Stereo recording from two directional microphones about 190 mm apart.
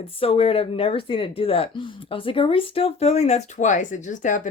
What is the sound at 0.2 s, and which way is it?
A woman's voice, 30° left (ahead or behind).